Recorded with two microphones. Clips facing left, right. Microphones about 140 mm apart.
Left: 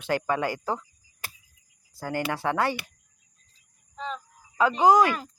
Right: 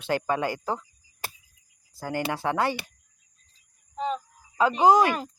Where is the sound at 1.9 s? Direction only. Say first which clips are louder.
Even; 20° right (ahead or behind).